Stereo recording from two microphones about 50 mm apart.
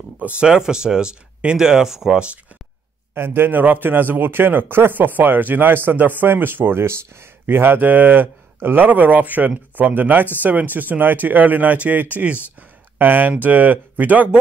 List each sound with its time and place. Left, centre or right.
0.4 s speech: centre
3.2 s a man's voice: right